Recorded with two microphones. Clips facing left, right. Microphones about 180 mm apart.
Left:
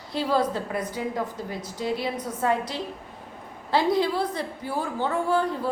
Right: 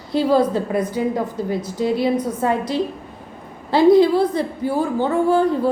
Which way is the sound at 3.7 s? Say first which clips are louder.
Right 10 dB; 15° right (ahead or behind).